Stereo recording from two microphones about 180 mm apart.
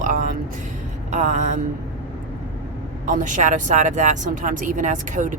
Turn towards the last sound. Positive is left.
turn(degrees=-45)  # may be behind; listen again after turning